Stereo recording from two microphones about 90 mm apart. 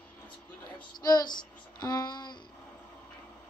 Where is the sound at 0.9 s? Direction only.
50° left (ahead or behind).